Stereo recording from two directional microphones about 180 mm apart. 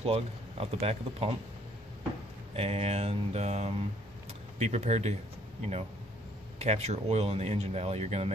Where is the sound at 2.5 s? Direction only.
35° right (ahead or behind).